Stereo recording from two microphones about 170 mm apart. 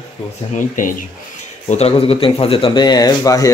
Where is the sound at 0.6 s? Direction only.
50° left (ahead or behind).